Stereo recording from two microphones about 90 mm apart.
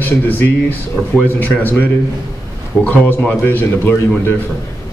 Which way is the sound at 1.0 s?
15° right (ahead or behind).